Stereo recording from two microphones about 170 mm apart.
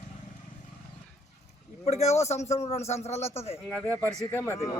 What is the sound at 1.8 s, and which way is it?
A man's voice, 40° left (ahead or behind).